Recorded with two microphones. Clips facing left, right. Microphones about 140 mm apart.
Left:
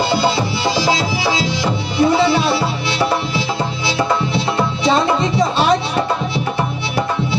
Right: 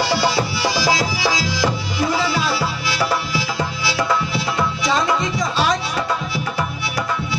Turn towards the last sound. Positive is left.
turn(degrees=30)  # may be behind; listen again after turning